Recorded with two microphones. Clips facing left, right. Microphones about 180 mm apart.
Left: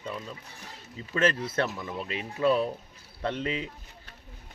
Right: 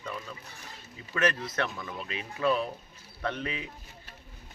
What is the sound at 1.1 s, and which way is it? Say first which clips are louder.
Speech: left 3 dB; 25° left (ahead or behind).